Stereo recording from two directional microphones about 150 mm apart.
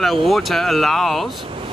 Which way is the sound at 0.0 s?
Centre (ahead or behind).